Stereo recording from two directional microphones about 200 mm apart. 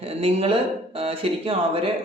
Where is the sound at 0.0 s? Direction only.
30° right (ahead or behind).